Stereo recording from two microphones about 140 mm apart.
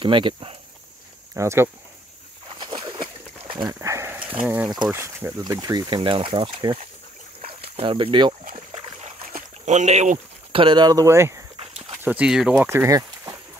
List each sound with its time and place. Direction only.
0.0 s speech: 35° right (ahead or behind)
1.3 s speech: 20° right (ahead or behind)
2.6 s a sound: 35° right (ahead or behind)
3.8 s a sound: 20° right (ahead or behind)
4.2 s speech: 10° right (ahead or behind)
5.4 s speech: 30° right (ahead or behind)
9.7 s speech: 55° right (ahead or behind); by 11.4 s 20° right (ahead or behind)
11.5 s walk: 45° right (ahead or behind)
12.0 s speech: 10° right (ahead or behind)
12.6 s speech: 20° right (ahead or behind)